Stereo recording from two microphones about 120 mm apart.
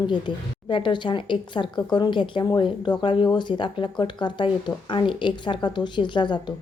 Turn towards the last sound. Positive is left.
turn(degrees=40)  # may be behind; listen again after turning